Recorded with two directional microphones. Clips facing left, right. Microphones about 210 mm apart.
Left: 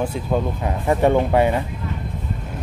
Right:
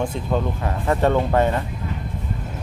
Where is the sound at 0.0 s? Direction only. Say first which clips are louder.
Left 1 dB; 10° left (ahead or behind).